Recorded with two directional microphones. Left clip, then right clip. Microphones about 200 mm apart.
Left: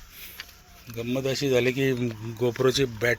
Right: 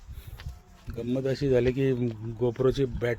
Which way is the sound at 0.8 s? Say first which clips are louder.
Left 1 dB; 25° right (ahead or behind).